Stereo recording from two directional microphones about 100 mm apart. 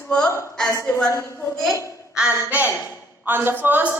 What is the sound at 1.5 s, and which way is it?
Speech, 5° left (ahead or behind).